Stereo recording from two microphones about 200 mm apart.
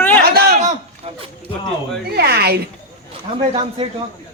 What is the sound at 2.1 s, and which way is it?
Speech, 50° right (ahead or behind).